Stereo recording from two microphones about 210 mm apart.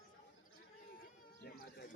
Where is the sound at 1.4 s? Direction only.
50° left (ahead or behind).